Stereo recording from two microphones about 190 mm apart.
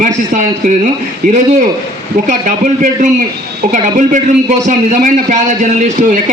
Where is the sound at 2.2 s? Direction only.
45° right (ahead or behind).